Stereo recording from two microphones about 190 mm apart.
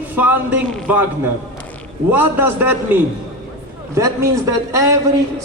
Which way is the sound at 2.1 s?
10° right (ahead or behind).